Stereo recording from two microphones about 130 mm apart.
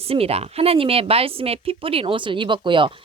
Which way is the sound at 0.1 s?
50° right (ahead or behind).